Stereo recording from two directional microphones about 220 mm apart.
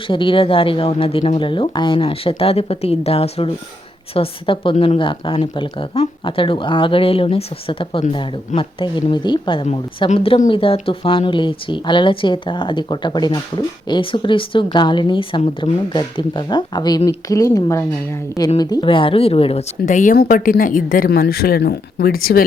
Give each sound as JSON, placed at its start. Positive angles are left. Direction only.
{"t": 0.1, "sound": "speech", "side_deg": 25}
{"t": 19.8, "sound": "speech", "side_deg": 35}